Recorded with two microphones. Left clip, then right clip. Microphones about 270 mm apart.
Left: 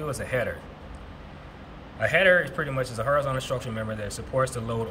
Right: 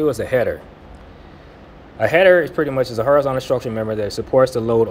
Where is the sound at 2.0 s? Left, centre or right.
Centre.